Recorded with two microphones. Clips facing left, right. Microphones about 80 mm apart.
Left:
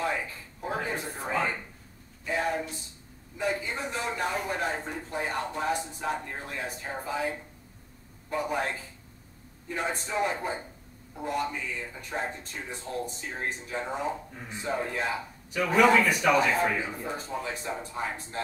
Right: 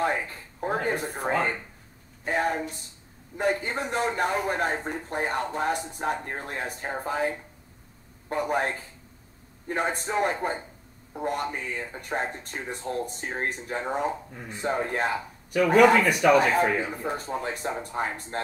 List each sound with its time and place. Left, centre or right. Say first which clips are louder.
0.0 s speech: right 4 dB; right